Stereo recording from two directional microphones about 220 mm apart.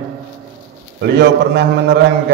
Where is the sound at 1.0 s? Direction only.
50° right (ahead or behind).